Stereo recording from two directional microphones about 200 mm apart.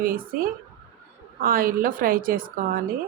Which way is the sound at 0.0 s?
45° right (ahead or behind).